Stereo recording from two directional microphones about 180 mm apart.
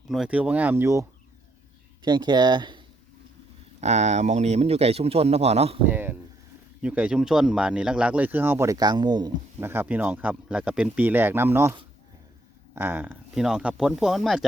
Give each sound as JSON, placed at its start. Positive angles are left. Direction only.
{"t": 0.1, "sound": "speech", "side_deg": -5}
{"t": 2.0, "sound": "speech", "side_deg": -25}
{"t": 3.8, "sound": "speech", "side_deg": -40}
{"t": 5.9, "sound": "speech", "side_deg": -10}
{"t": 9.6, "sound": "speech", "side_deg": -10}
{"t": 12.7, "sound": "speech", "side_deg": -10}